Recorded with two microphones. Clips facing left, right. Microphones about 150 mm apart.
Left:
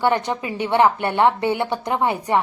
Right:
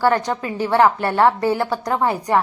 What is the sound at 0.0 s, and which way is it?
A woman's voice, 20° left (ahead or behind).